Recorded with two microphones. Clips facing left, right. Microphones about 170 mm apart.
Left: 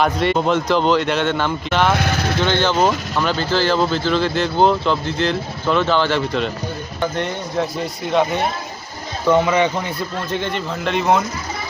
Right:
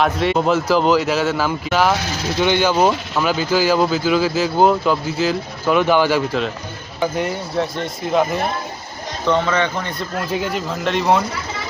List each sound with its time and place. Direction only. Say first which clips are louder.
0.0 s speech: even; centre (ahead or behind)
2.0 s speech: left 3 dB; 60° left (ahead or behind)
2.4 s speech: right 2 dB; 10° right (ahead or behind)
9.2 s speech: left 3 dB; 10° left (ahead or behind)
10.2 s speech: right 2 dB; 5° right (ahead or behind)